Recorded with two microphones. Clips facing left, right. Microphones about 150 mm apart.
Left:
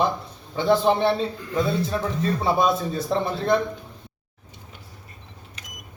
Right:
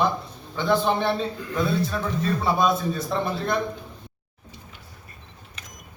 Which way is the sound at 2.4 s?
25° left (ahead or behind).